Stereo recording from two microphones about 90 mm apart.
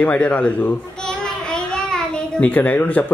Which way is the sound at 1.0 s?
5° left (ahead or behind).